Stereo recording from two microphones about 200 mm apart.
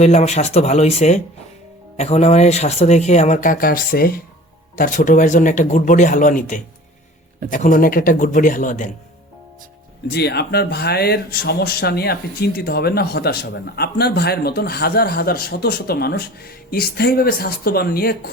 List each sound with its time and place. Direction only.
0.0 s speech: 35° left (ahead or behind)
10.1 s speech: 55° left (ahead or behind)